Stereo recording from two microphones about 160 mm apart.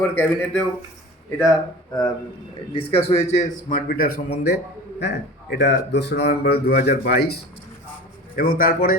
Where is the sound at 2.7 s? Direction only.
35° left (ahead or behind); by 7.4 s 90° left.